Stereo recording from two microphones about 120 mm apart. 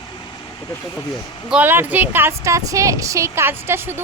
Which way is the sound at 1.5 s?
15° right (ahead or behind).